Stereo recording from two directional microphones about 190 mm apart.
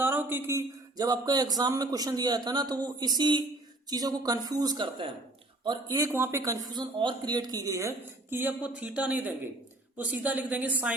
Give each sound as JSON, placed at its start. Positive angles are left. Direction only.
{"t": 0.0, "sound": "a woman's voice", "side_deg": -10}